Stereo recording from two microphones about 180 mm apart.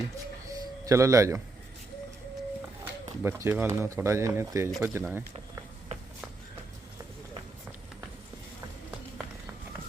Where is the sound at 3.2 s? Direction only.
15° right (ahead or behind).